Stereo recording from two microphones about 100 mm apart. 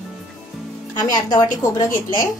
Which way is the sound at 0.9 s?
45° left (ahead or behind).